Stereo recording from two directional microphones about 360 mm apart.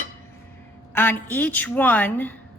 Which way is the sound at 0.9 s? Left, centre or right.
Centre.